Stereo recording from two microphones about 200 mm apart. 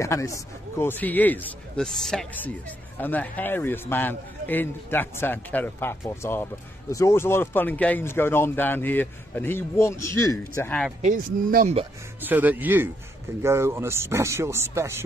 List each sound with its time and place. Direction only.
0.0 s speech: 15° left (ahead or behind)
11.0 s speech: 40° right (ahead or behind)
12.2 s speech: 10° right (ahead or behind)